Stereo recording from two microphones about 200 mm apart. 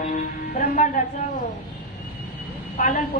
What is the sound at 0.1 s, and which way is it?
Music, 40° left (ahead or behind).